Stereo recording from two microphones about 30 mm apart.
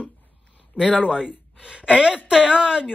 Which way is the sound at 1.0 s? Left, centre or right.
Right.